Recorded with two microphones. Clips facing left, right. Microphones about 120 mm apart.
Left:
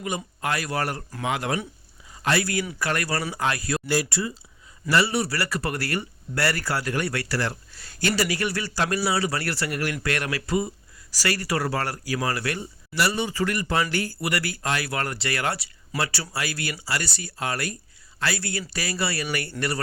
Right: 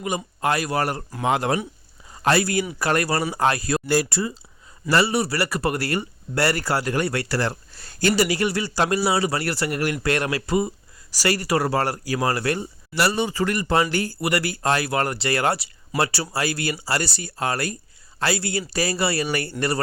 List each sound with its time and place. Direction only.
0.4 s a man's voice: 25° right (ahead or behind)
3.3 s a man's voice: 40° right (ahead or behind)
5.1 s a man's voice: 20° right (ahead or behind)